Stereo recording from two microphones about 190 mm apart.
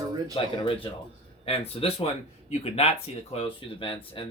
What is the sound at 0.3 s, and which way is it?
Speech, 30° left (ahead or behind).